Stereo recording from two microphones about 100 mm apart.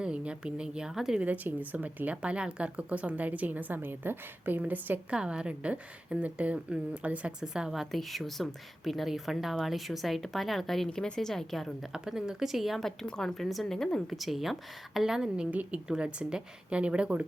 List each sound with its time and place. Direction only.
0.0 s speech: 10° right (ahead or behind)
1.2 s speech: 15° right (ahead or behind)